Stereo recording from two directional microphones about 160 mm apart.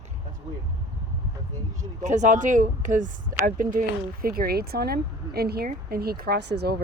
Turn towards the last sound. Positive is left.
turn(degrees=-90)